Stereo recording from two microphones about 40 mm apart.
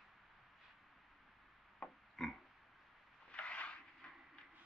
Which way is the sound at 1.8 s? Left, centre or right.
Centre.